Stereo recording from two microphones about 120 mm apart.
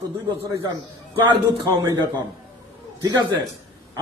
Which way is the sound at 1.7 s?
30° right (ahead or behind).